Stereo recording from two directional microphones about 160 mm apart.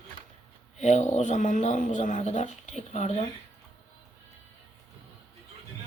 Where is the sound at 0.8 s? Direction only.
45° left (ahead or behind).